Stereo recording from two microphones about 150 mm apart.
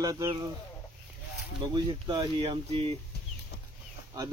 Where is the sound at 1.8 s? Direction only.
30° right (ahead or behind).